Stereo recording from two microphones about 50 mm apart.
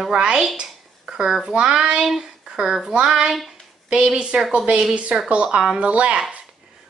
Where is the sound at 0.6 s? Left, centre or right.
Centre.